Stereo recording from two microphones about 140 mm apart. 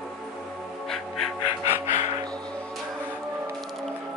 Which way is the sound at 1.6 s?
15° right (ahead or behind).